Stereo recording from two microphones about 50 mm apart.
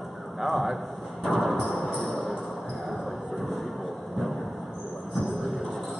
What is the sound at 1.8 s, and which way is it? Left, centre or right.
Speech, centre.